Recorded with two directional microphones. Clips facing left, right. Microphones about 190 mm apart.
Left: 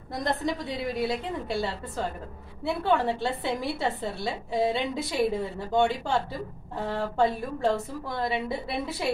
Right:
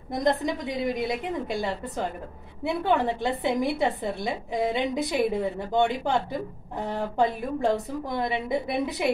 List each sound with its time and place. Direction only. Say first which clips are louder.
0.1 s a woman's voice: right 4 dB; 20° right (ahead or behind)